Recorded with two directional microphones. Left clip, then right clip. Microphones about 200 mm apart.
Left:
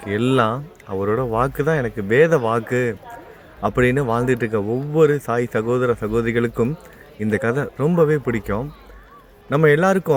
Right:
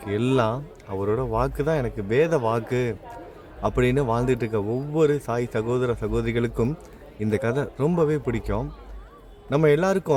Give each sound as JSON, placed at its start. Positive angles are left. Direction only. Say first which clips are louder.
{"t": 0.0, "sound": "speech", "louder": "left 4 dB", "side_deg": 10}